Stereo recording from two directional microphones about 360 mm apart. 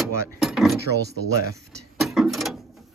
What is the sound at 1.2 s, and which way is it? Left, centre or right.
Drawer open or close, centre.